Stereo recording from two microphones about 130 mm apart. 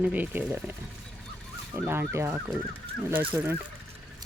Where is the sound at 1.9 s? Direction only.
20° right (ahead or behind).